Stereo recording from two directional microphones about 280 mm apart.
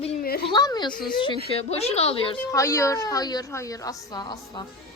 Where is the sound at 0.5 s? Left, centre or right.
Centre.